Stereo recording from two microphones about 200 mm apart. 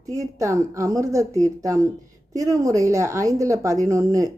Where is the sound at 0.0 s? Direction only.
15° right (ahead or behind).